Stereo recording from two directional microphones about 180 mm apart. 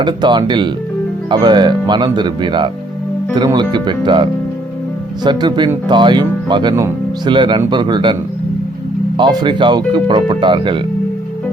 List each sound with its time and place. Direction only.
0.0 s speech: 25° right (ahead or behind)
9.1 s speech: 25° right (ahead or behind)